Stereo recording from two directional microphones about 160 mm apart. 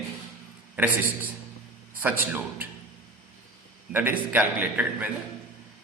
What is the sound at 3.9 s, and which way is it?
A man's voice, 10° right (ahead or behind).